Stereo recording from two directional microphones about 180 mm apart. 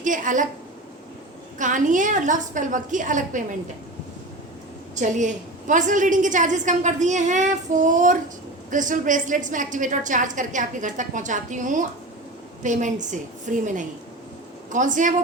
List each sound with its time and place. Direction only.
0.0 s a woman's voice: 45° right (ahead or behind)
1.5 s a woman's voice: 45° right (ahead or behind)
4.9 s a woman's voice: 45° right (ahead or behind)